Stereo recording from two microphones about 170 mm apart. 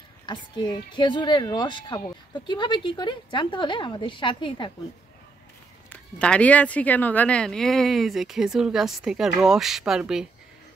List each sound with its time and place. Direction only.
0.3 s a woman's voice: 25° left (ahead or behind)
5.9 s speech: 5° left (ahead or behind)